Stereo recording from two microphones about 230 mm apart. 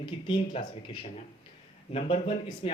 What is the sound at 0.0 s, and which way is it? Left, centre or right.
Speech, left.